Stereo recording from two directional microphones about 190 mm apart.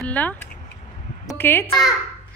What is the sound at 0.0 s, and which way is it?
A child's voice, 10° left (ahead or behind).